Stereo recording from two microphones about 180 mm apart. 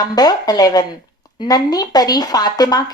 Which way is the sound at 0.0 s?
20° left (ahead or behind).